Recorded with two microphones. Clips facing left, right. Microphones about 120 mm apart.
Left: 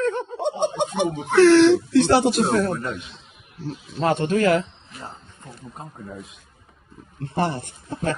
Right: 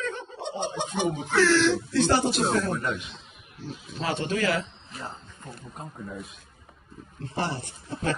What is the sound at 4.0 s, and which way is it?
Speech, 50° left (ahead or behind).